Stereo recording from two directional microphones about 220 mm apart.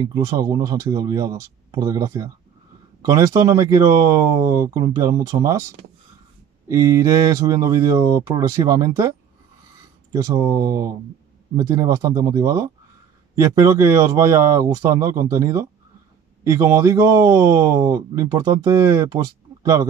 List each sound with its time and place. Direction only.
0.0 s speech: 15° right (ahead or behind)
6.7 s speech: 15° right (ahead or behind)
10.1 s speech: 15° right (ahead or behind)